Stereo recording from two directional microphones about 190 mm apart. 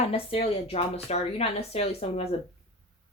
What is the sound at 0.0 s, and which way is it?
A woman's voice, 30° left (ahead or behind).